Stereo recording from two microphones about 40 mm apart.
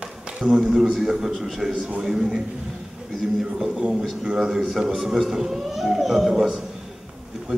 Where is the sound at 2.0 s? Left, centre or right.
Centre.